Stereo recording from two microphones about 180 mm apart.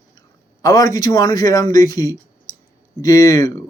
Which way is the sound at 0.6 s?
20° left (ahead or behind).